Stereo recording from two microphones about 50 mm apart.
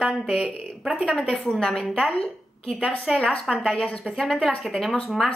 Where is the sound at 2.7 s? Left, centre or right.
Right.